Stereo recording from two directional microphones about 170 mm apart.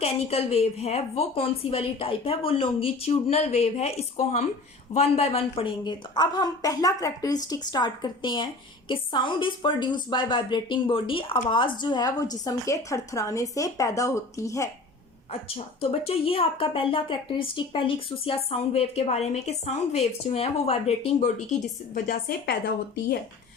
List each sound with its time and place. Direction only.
0.0 s a woman's voice: 35° left (ahead or behind); by 14.7 s 20° left (ahead or behind)
15.3 s speech: 35° left (ahead or behind)
21.9 s a woman's voice: 55° left (ahead or behind)